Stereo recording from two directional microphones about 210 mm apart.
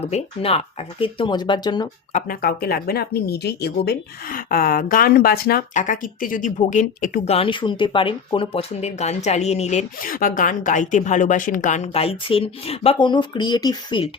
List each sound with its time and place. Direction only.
0.0 s speech: 30° left (ahead or behind)
2.1 s speech: 40° left (ahead or behind)
7.3 s speech: 25° left (ahead or behind)